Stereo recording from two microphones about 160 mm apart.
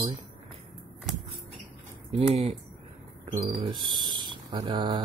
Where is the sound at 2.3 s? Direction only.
40° right (ahead or behind).